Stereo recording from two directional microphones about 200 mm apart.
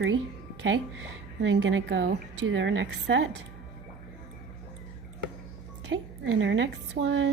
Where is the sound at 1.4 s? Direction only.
65° right (ahead or behind).